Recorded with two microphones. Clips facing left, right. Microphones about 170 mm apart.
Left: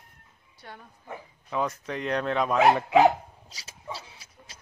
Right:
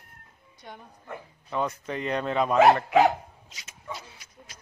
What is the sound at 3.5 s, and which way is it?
Dog, 35° left (ahead or behind).